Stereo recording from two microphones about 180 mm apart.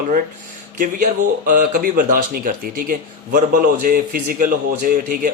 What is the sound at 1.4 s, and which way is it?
Speech, 50° right (ahead or behind).